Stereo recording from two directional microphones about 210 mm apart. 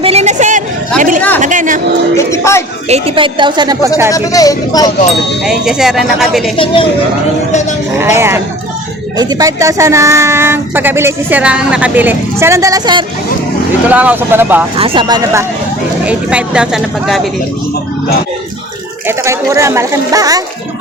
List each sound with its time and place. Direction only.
0.0 s a sound: 30° right (ahead or behind)
1.4 s speech: 35° right (ahead or behind)
2.1 s speech: 15° left (ahead or behind)
2.9 s a woman's voice: 25° right (ahead or behind)
4.1 s speech: 15° left (ahead or behind)
5.5 s speech: centre (ahead or behind)
8.0 s speech: 10° right (ahead or behind)
13.8 s speech: 5° right (ahead or behind)
14.8 s a woman's voice: 25° right (ahead or behind); by 17.2 s 5° right (ahead or behind)
19.0 s speech: 15° right (ahead or behind)